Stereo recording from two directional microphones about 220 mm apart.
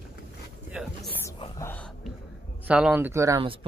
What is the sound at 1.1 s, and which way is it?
Whispering, 15° left (ahead or behind).